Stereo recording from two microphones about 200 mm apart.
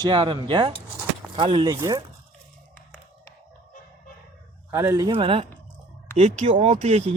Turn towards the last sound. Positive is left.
turn(degrees=-35)  # may be behind; listen again after turning